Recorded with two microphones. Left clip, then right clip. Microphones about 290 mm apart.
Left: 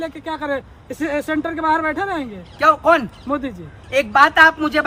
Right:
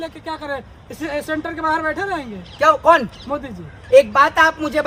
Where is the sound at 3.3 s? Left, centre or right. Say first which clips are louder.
Left 4 dB; left.